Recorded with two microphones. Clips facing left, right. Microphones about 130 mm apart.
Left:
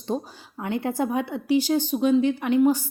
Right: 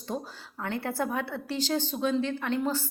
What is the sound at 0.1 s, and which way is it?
A woman's voice, 20° left (ahead or behind).